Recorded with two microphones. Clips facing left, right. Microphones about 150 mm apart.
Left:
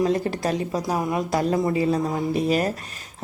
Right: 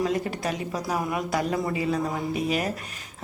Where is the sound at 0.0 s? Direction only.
35° left (ahead or behind).